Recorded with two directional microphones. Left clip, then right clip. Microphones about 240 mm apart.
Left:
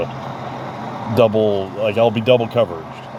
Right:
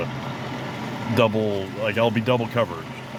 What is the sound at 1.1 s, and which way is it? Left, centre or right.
Speech, centre.